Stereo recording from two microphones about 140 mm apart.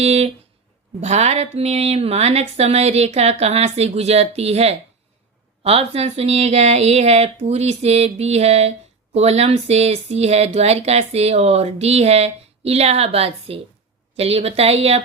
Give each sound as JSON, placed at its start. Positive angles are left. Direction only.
{"t": 0.0, "sound": "speech", "side_deg": -45}